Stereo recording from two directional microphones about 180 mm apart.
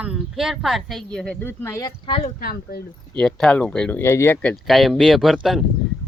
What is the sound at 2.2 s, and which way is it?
Speech, 55° left (ahead or behind).